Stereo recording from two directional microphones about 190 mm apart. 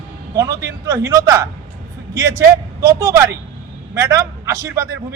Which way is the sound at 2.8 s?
15° right (ahead or behind).